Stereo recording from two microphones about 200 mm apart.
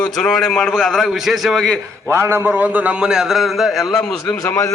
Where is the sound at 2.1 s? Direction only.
10° right (ahead or behind).